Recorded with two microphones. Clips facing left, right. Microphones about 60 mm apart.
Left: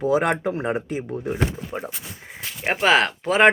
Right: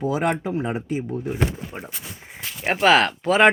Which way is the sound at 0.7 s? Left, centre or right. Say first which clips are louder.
Even; left.